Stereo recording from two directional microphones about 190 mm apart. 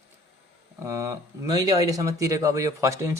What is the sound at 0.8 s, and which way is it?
Speech, 15° right (ahead or behind).